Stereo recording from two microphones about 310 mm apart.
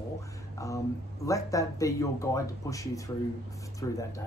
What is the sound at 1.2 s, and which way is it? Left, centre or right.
Speech, centre.